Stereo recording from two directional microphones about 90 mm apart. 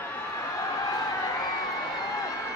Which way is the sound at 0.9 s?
45° left (ahead or behind).